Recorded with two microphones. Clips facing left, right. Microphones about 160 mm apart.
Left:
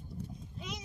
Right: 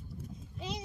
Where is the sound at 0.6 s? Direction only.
30° right (ahead or behind).